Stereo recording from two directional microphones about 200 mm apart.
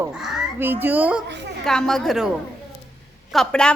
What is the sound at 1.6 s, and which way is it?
A woman's voice, centre (ahead or behind).